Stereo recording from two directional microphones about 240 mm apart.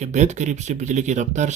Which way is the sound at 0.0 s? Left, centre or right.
Right.